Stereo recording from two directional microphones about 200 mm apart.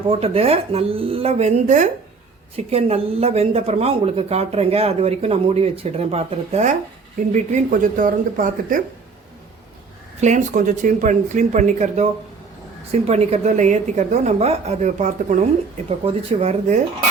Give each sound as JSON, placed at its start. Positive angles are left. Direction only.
{"t": 0.1, "sound": "speech", "side_deg": -30}
{"t": 10.2, "sound": "speech", "side_deg": -35}